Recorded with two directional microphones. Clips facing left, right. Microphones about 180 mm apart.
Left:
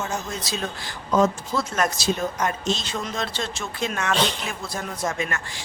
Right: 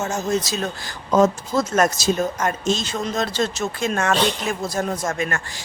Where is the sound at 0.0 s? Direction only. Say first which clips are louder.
Right 7 dB; 45° right (ahead or behind).